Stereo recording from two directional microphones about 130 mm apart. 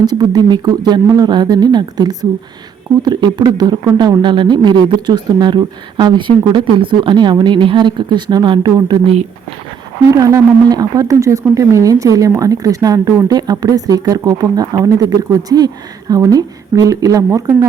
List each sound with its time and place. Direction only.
0.0 s speech: 30° right (ahead or behind)
10.1 s speech: 25° right (ahead or behind)